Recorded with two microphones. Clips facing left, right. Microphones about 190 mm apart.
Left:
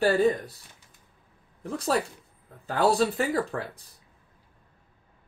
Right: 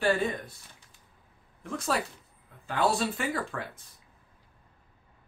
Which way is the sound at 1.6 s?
35° left (ahead or behind).